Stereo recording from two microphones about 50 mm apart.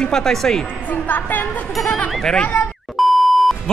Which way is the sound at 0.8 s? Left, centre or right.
Left.